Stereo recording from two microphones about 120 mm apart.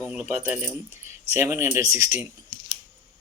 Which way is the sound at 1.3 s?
20° right (ahead or behind).